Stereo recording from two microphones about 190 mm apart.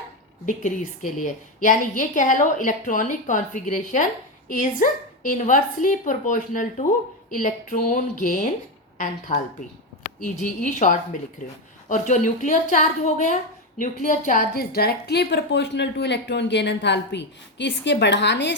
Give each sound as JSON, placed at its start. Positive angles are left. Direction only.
{"t": 0.4, "sound": "a woman's voice", "side_deg": 40}